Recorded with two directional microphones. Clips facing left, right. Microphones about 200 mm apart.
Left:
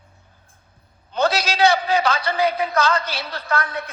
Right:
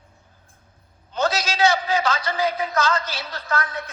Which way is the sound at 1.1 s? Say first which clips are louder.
Left 3 dB; 60° left (ahead or behind).